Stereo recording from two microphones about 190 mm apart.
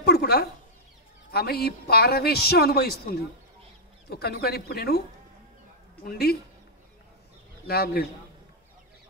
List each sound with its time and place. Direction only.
0.0 s a sound: 55° left (ahead or behind)
1.3 s a man's voice: 55° left (ahead or behind)
4.1 s a man's voice: 55° left (ahead or behind)
6.0 s a man's voice: 55° left (ahead or behind)
7.6 s a man's voice: 55° left (ahead or behind)